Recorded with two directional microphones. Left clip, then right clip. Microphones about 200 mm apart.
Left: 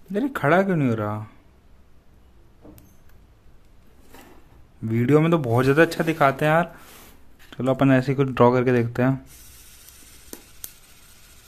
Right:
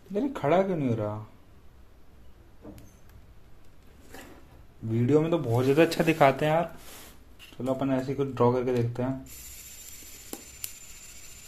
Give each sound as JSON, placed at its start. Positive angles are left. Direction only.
{"t": 0.1, "sound": "speech", "side_deg": 30}
{"t": 4.9, "sound": "speech", "side_deg": 35}
{"t": 5.8, "sound": "speech", "side_deg": 10}
{"t": 6.4, "sound": "speech", "side_deg": 25}
{"t": 7.5, "sound": "speech", "side_deg": 40}
{"t": 9.3, "sound": "a sound", "side_deg": 0}